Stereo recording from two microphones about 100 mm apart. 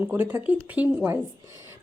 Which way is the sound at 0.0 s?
20° right (ahead or behind).